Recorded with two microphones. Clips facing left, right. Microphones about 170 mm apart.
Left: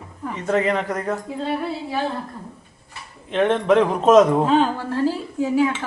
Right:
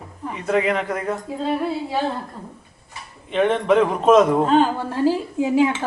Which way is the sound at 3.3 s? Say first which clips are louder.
Even; centre (ahead or behind).